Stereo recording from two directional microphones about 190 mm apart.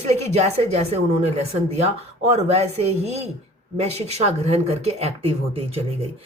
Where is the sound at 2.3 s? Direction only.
35° right (ahead or behind).